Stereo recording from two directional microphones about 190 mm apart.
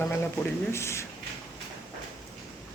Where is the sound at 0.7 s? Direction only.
15° left (ahead or behind).